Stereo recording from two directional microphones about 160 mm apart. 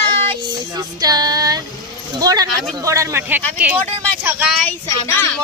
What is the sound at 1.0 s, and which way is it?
Speech, 25° right (ahead or behind).